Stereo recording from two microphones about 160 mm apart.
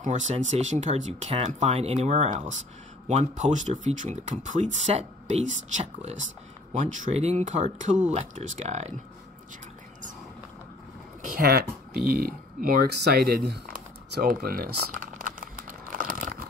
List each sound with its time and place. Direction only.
0.0 s speech: 50° right (ahead or behind)
11.2 s speech: 70° right (ahead or behind)
12.1 s a sound: 70° right (ahead or behind)